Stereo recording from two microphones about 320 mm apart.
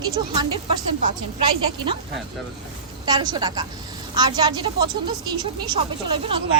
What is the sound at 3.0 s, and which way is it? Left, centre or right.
A woman's voice, centre.